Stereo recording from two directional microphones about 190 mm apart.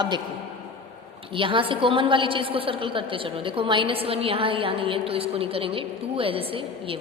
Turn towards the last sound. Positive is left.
turn(degrees=-30)  # may be behind; listen again after turning